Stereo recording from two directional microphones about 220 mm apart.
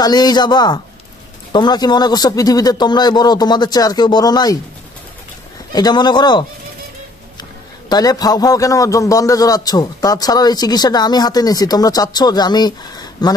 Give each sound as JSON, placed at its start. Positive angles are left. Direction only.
{"t": 0.0, "sound": "a man's voice", "side_deg": 20}
{"t": 5.7, "sound": "a man's voice", "side_deg": 20}
{"t": 7.9, "sound": "a man's voice", "side_deg": 15}